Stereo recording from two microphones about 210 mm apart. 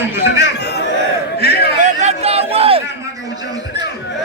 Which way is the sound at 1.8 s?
35° right (ahead or behind).